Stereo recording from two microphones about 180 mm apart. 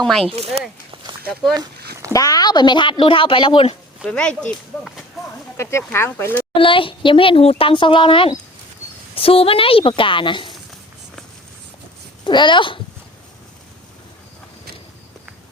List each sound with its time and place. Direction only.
0.0 s speech: 5° left (ahead or behind)
0.3 s speech: 35° right (ahead or behind)
2.1 s speech: 20° left (ahead or behind)
4.0 s speech: 5° left (ahead or behind)
4.8 s a sound: centre (ahead or behind)
5.5 s speech: 15° left (ahead or behind)
6.6 s speech: 30° left (ahead or behind)
12.2 s speech: 25° left (ahead or behind)